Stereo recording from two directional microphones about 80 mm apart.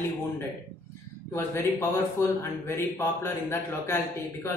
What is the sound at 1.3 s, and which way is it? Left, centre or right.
Speech, left.